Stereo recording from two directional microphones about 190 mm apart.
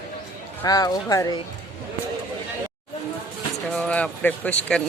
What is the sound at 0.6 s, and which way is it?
Speech, 20° left (ahead or behind).